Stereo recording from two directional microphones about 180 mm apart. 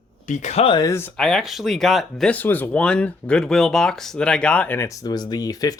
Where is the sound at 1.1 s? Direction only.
Centre (ahead or behind).